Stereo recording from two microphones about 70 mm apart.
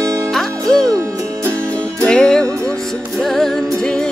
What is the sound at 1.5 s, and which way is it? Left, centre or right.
Music, left.